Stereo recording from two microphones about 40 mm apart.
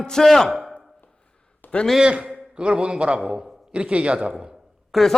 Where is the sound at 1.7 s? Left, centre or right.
Left.